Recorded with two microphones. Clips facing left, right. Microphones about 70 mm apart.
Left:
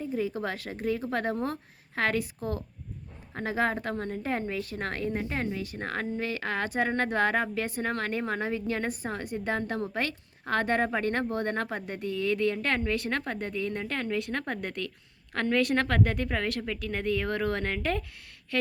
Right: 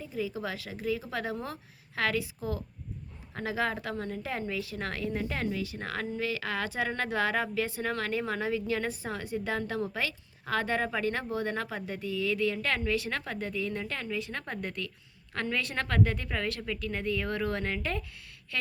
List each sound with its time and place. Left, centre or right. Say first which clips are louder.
0.0 s a woman's voice: left 4 dB; left